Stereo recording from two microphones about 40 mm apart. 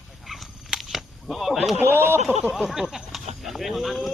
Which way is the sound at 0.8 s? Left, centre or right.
Centre.